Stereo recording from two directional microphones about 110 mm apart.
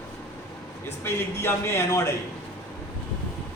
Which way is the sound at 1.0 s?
20° left (ahead or behind).